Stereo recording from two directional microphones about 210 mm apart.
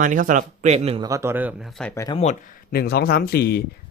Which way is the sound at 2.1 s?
35° left (ahead or behind).